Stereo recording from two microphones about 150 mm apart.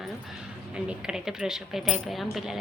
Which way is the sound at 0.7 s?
5° right (ahead or behind).